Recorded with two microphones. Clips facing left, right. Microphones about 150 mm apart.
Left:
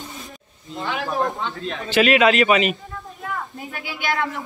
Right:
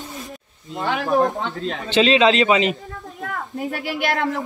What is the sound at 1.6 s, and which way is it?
A man's voice, 25° right (ahead or behind).